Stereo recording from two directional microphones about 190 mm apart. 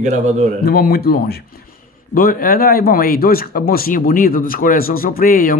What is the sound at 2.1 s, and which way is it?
Speech, 50° left (ahead or behind).